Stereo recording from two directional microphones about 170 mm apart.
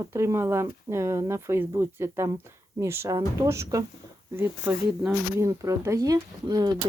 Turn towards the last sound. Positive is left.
turn(degrees=-20)  # may be behind; listen again after turning